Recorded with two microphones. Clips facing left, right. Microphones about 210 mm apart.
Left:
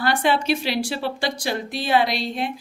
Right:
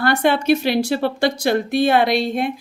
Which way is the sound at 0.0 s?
55° right (ahead or behind).